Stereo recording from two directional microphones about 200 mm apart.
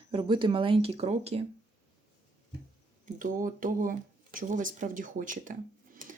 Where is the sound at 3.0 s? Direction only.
40° right (ahead or behind).